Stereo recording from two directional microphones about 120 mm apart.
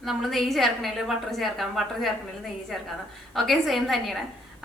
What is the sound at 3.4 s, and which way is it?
Speech, centre (ahead or behind).